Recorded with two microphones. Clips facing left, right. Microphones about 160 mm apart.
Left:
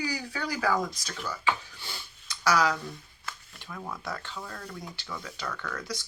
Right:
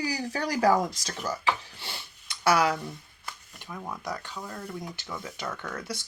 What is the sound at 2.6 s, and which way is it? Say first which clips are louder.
Speech: right 1 dB; 20° right (ahead or behind).